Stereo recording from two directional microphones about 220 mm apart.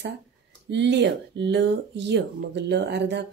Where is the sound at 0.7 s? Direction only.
50° right (ahead or behind).